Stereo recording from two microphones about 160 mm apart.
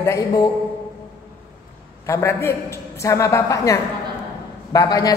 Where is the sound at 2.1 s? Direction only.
15° left (ahead or behind).